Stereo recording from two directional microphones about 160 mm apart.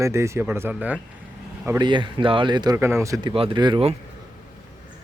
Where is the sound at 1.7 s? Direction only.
30° right (ahead or behind).